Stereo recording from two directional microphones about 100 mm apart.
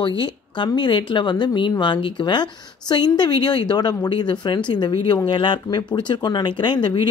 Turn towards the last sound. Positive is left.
turn(degrees=50)  # may be behind; listen again after turning